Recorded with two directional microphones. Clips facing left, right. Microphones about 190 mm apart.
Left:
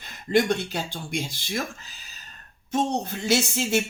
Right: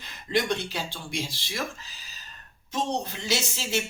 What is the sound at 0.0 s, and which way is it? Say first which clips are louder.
Speech: left 5 dB; 50° left (ahead or behind).